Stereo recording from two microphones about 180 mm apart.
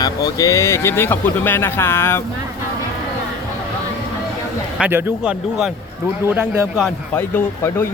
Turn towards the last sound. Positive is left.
turn(degrees=10)  # may be behind; listen again after turning